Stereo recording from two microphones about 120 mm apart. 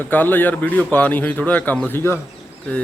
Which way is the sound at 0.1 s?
15° left (ahead or behind).